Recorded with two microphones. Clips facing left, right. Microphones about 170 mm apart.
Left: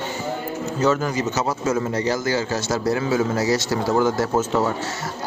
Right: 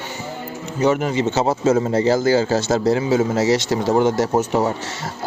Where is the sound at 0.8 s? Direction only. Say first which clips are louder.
Right 2 dB; 15° right (ahead or behind).